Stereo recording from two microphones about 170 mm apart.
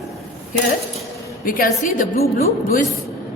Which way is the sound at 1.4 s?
55° left (ahead or behind).